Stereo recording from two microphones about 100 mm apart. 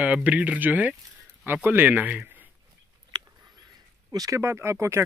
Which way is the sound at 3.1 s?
45° right (ahead or behind).